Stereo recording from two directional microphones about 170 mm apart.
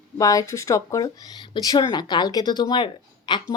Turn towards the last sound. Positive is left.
turn(degrees=25)  # may be behind; listen again after turning